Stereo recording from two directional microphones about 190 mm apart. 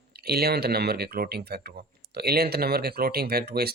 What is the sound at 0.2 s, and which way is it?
Speech, 55° right (ahead or behind).